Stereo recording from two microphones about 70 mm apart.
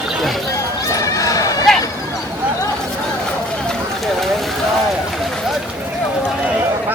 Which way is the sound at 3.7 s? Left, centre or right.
Centre.